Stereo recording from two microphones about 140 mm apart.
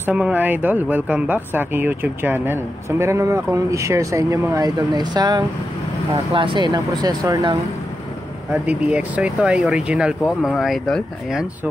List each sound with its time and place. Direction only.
0.0 s speech: 10° right (ahead or behind); by 7.5 s 25° right (ahead or behind)
8.6 s speech: 10° right (ahead or behind)